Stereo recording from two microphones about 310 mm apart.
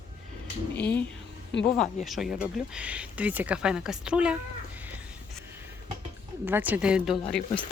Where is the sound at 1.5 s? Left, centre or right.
Left.